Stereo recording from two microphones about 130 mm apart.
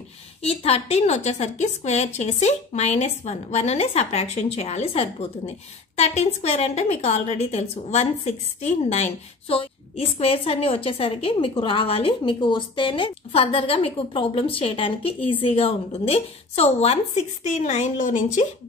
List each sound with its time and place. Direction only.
0.4 s a woman's voice: 50° left (ahead or behind); by 18.4 s 80° left